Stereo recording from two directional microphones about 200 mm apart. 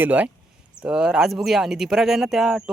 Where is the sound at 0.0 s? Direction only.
10° right (ahead or behind).